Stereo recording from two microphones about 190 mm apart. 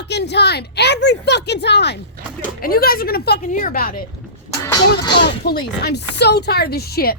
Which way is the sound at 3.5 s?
45° left (ahead or behind).